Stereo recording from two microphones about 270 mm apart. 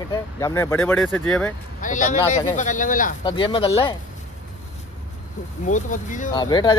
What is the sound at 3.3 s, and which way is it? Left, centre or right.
Speech, centre.